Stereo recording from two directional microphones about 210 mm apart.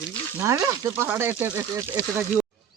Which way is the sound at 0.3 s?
15° right (ahead or behind).